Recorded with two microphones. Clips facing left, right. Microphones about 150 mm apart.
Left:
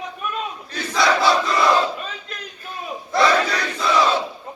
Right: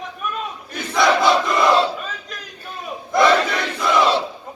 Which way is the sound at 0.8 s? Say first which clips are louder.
Right 2 dB; 15° right (ahead or behind).